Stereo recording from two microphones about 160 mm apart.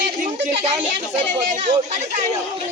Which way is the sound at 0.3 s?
40° right (ahead or behind).